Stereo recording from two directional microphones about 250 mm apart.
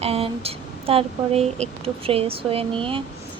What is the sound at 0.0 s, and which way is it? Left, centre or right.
Speech, right.